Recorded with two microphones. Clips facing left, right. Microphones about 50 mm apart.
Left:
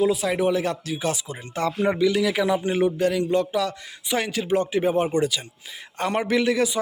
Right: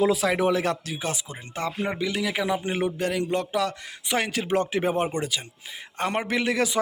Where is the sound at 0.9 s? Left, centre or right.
Right.